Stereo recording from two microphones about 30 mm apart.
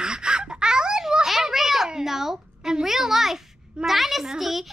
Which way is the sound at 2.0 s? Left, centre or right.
Centre.